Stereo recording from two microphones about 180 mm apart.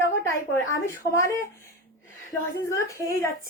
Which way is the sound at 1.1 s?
15° left (ahead or behind).